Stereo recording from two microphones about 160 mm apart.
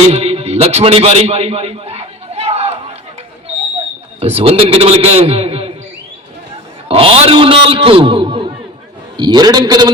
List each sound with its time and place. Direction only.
0.1 s music: 40° right (ahead or behind)
4.2 s a man's voice: 40° right (ahead or behind)
6.8 s a man's voice: 40° right (ahead or behind)